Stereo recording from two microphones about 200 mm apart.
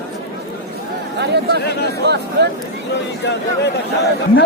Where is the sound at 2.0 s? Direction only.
55° right (ahead or behind).